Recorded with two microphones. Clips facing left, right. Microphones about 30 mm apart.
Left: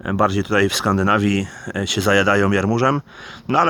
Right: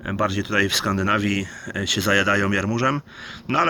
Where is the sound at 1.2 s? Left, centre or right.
Centre.